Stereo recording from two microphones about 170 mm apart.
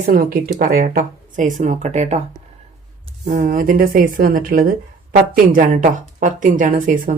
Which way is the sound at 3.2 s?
50° right (ahead or behind).